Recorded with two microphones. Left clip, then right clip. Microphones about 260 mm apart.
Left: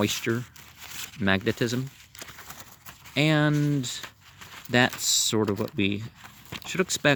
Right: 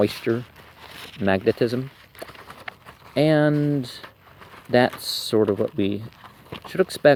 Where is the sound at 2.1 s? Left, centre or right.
Left.